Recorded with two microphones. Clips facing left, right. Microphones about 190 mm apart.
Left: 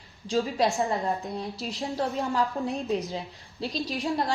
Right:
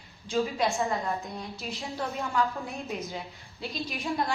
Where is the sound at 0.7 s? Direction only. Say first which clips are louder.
Left 2 dB; 15° left (ahead or behind).